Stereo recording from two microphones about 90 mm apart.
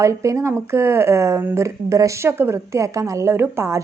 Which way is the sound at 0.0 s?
35° right (ahead or behind).